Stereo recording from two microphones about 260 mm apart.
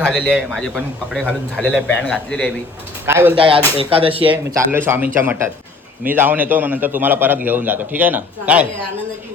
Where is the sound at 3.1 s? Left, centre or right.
Centre.